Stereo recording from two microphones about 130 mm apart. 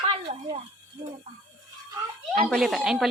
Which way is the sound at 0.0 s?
45° right (ahead or behind).